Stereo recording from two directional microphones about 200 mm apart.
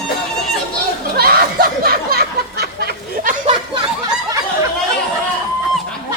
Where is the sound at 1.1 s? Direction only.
50° right (ahead or behind).